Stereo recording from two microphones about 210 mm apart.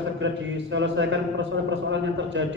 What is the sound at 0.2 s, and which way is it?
A man's voice, 60° right (ahead or behind).